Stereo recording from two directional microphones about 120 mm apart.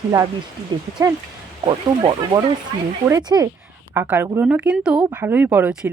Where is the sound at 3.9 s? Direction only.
15° right (ahead or behind).